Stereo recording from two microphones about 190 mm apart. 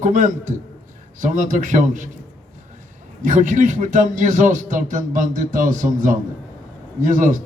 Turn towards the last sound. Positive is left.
turn(degrees=-45)  # may be behind; listen again after turning